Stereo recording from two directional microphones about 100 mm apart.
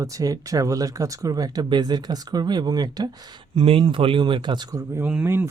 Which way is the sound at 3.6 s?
70° right (ahead or behind).